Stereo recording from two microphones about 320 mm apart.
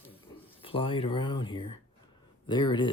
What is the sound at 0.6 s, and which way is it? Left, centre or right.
Speech, centre.